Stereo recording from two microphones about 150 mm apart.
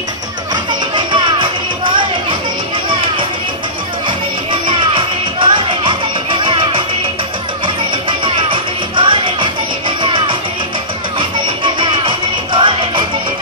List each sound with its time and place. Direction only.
0.7 s music: 30° right (ahead or behind)
4.5 s music: 35° right (ahead or behind)